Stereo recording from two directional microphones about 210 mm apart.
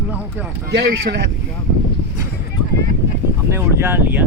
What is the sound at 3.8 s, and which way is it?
Speech, 10° right (ahead or behind).